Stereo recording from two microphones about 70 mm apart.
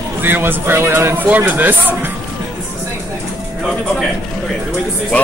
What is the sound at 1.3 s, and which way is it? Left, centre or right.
Speech, right.